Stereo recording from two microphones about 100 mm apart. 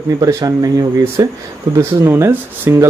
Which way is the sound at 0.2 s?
40° right (ahead or behind).